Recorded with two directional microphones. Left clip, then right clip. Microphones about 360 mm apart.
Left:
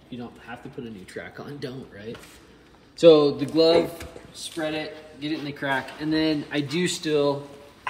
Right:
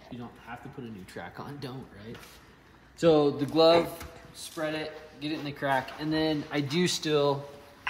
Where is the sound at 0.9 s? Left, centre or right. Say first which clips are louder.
Left 4 dB; centre.